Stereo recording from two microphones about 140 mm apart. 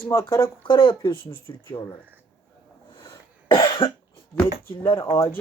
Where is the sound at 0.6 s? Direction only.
35° left (ahead or behind).